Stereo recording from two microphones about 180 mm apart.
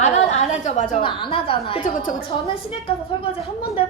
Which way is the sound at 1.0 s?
30° left (ahead or behind).